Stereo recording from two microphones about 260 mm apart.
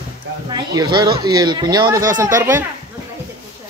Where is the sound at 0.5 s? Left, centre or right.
Centre.